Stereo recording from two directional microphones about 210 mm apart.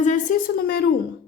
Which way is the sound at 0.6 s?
50° left (ahead or behind).